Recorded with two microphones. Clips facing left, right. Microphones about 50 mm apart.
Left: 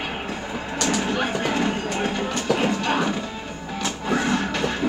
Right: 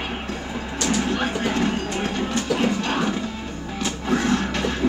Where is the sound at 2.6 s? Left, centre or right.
Centre.